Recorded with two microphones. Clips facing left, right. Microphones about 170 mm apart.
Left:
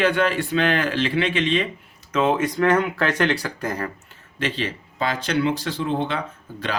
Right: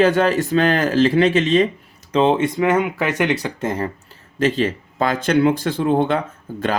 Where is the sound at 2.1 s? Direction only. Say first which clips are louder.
Right 4 dB; 30° right (ahead or behind).